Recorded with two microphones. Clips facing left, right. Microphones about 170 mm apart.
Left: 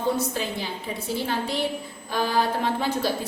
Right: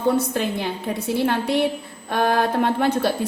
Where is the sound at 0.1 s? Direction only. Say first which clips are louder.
Right 6 dB; 60° right (ahead or behind).